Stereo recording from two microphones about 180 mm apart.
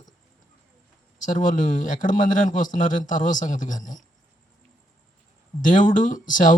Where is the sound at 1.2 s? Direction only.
45° left (ahead or behind).